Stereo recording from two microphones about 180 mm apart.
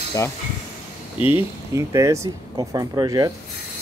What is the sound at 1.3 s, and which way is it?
Speech, 15° right (ahead or behind).